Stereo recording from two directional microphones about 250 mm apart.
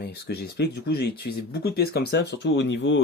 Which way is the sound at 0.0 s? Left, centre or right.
Left.